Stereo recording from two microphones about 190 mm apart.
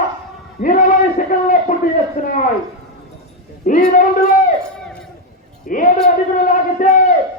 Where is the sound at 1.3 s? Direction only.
45° left (ahead or behind).